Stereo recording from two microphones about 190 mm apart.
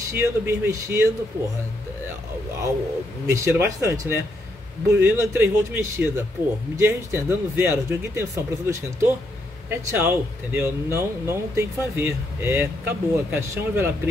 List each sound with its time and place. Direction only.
0.0 s speech: 15° right (ahead or behind)
3.3 s speech: 15° right (ahead or behind)